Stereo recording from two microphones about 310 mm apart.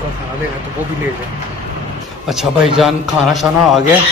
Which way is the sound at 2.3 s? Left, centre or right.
Centre.